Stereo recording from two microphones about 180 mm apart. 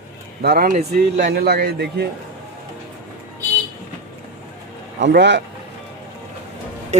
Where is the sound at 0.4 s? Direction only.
55° right (ahead or behind).